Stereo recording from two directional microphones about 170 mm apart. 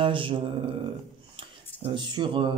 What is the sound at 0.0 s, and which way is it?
Speech, 30° right (ahead or behind).